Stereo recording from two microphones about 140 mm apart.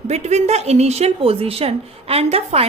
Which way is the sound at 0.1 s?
50° right (ahead or behind).